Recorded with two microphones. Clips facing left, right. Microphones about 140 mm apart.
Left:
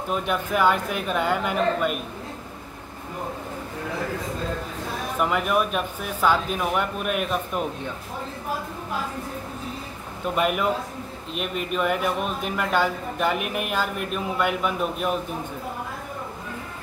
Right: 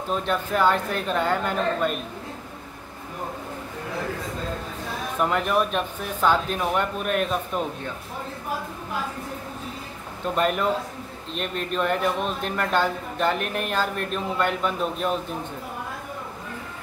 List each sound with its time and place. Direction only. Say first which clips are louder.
0.1 s a man's voice: even; 10° left (ahead or behind)
5.2 s speech: even; 5° left (ahead or behind)
10.3 s a man's voice: even; 10° left (ahead or behind)